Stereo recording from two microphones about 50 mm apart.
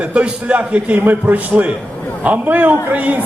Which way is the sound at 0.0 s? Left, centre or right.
Right.